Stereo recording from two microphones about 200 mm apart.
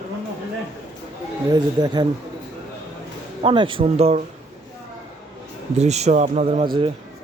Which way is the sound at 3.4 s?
25° right (ahead or behind).